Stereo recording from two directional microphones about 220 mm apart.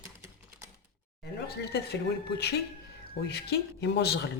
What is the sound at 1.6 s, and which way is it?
Speech, 50° left (ahead or behind).